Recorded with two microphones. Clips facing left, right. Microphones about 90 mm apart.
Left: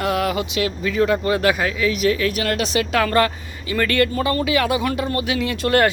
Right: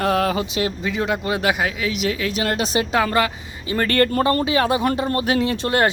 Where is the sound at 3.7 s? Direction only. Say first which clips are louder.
Right 1 dB; 40° right (ahead or behind).